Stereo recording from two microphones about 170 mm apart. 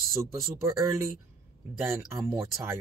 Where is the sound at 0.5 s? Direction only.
15° right (ahead or behind).